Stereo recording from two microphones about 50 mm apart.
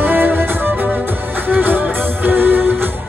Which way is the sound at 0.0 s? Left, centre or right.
Right.